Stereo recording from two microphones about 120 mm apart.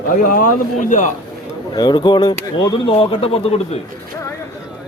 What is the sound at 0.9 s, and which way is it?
Speech, 90° left.